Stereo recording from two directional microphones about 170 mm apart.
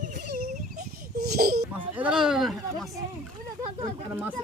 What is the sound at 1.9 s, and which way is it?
Speech, 5° right (ahead or behind).